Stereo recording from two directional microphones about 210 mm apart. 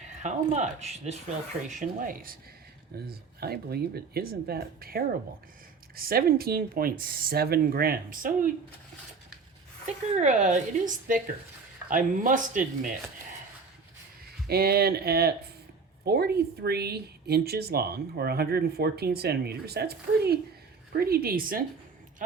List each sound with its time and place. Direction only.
0.0 s a woman's voice: 35° right (ahead or behind)
10.2 s a woman's voice: 35° right (ahead or behind)
14.4 s speech: 50° right (ahead or behind)